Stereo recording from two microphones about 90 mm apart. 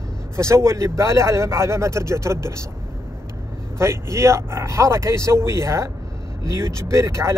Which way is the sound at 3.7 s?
30° right (ahead or behind).